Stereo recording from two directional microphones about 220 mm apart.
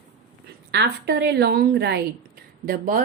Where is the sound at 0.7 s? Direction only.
50° right (ahead or behind).